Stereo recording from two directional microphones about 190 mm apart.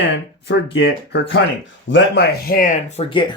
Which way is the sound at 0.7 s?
65° left (ahead or behind).